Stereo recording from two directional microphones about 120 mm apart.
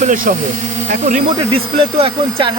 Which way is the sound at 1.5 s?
50° right (ahead or behind).